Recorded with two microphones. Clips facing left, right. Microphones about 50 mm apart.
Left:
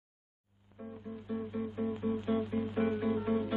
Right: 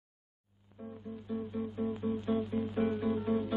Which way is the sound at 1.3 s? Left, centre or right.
Left.